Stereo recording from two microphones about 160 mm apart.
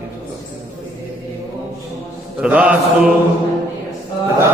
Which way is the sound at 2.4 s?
10° right (ahead or behind).